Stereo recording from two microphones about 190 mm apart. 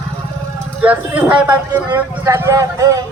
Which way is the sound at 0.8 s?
10° right (ahead or behind).